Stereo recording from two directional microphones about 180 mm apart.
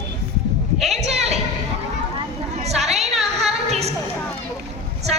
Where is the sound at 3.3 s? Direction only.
35° right (ahead or behind).